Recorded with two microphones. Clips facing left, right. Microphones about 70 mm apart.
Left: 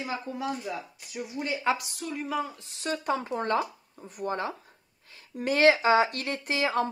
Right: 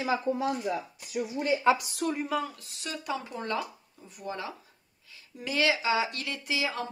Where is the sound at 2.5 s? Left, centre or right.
Left.